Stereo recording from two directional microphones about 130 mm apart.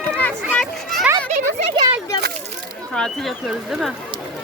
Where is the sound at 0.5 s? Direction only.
5° left (ahead or behind).